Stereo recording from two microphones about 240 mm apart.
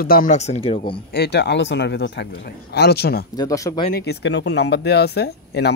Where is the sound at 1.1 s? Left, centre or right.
Left.